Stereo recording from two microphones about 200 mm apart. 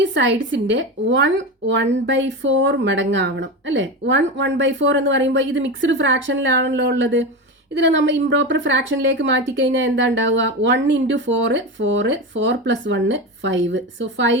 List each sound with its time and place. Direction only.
0.0 s a woman's voice: 60° right (ahead or behind)